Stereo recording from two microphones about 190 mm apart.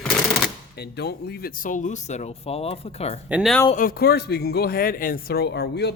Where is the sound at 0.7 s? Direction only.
60° left (ahead or behind); by 3.2 s 30° left (ahead or behind).